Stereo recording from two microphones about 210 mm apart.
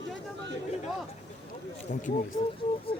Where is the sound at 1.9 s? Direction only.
35° left (ahead or behind).